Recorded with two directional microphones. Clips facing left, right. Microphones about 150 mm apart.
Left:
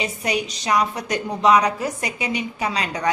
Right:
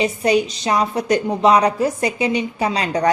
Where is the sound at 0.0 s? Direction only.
30° right (ahead or behind).